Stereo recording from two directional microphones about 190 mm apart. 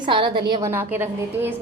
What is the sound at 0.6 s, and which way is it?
Speech, 15° right (ahead or behind).